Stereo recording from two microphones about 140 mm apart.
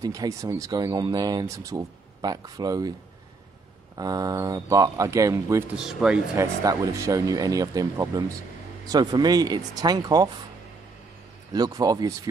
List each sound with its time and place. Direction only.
0.0 s speech: 25° right (ahead or behind)
3.9 s speech: 25° right (ahead or behind)
5.8 s speech: 5° right (ahead or behind)
6.3 s speech: 25° right (ahead or behind)
11.5 s speech: 25° right (ahead or behind)